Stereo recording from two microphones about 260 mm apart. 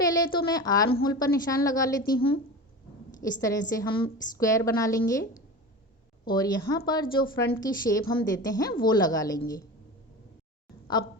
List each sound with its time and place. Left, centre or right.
0.0 s a woman's voice: centre
3.2 s a woman's voice: centre
6.2 s a woman's voice: centre